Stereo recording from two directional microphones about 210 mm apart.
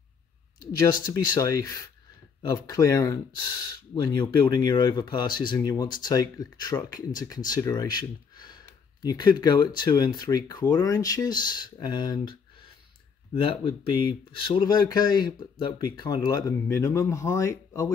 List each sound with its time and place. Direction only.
1.1 s speech: 15° left (ahead or behind)